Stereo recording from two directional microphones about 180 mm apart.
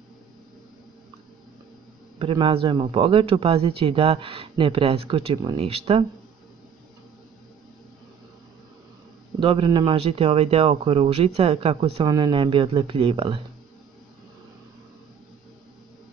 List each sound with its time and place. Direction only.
2.1 s a man's voice: 30° right (ahead or behind)
9.4 s a man's voice: 30° right (ahead or behind)